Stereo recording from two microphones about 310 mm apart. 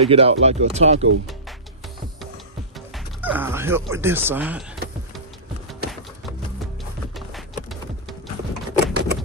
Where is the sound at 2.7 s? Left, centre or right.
Centre.